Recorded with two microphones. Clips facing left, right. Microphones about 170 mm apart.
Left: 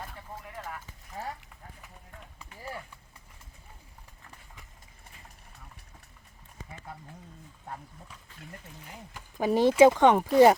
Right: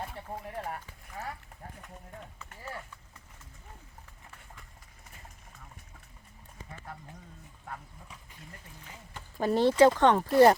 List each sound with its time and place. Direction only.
0.2 s a sound: 35° right (ahead or behind)
1.1 s speech: 25° left (ahead or behind)
2.6 s speech: 10° left (ahead or behind)
6.7 s a sound: 15° left (ahead or behind)
9.1 s speech: 10° left (ahead or behind)
10.2 s speech: 5° left (ahead or behind)